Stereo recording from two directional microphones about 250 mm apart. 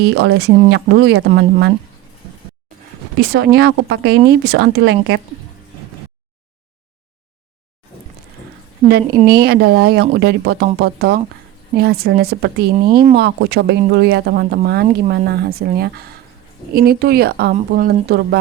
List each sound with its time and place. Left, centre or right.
0.0 s speech: right
3.2 s speech: right
9.1 s a woman's voice: centre
9.4 s speech: right
12.7 s speech: centre
13.1 s speech: right